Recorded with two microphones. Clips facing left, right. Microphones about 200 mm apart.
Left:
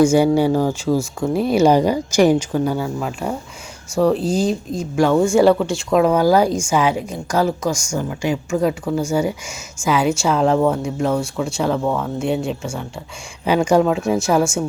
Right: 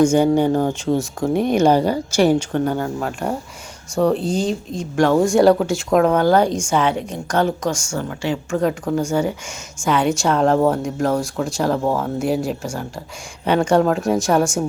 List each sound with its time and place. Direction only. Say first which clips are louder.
0.1 s a woman's voice: left 1 dB; 10° left (ahead or behind)
4.4 s speech: left 2 dB; 35° left (ahead or behind)
4.8 s a woman's voice: even; centre (ahead or behind)